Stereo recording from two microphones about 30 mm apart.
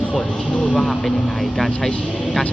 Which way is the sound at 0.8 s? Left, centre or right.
Centre.